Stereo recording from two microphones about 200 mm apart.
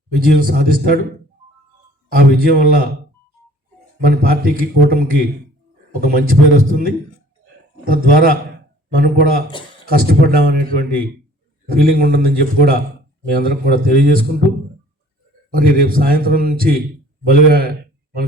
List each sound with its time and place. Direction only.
0.3 s a man's voice: 50° right (ahead or behind)
2.0 s a man's voice: 50° right (ahead or behind)
4.0 s a man's voice: 45° right (ahead or behind)
15.4 s a man's voice: 45° right (ahead or behind)